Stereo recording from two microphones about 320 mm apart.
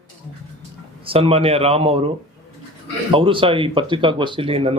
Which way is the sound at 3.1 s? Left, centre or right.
Centre.